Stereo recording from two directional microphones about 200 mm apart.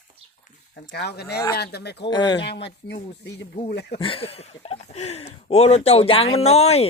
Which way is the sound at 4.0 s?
25° left (ahead or behind).